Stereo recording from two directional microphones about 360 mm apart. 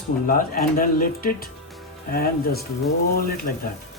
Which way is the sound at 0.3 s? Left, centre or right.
Left.